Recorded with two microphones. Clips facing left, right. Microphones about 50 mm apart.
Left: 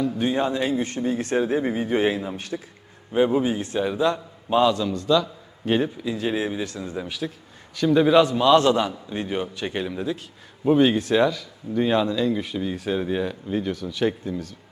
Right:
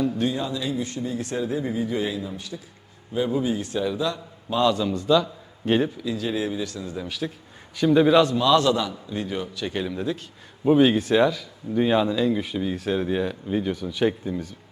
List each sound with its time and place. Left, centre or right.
0.3 s speech: left
4.7 s a man's voice: centre
6.0 s a man's voice: left
7.2 s speech: centre
8.4 s a man's voice: left
9.7 s speech: centre